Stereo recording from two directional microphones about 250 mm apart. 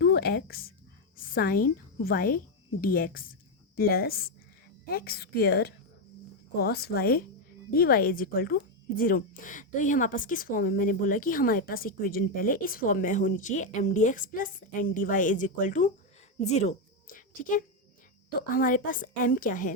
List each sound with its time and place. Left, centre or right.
0.0 s speech: left
1.1 s a sound: left
2.0 s a woman's voice: left